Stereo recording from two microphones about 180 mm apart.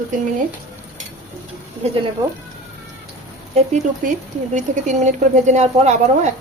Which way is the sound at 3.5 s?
40° right (ahead or behind).